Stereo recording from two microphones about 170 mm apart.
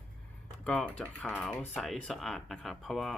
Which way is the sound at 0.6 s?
5° left (ahead or behind).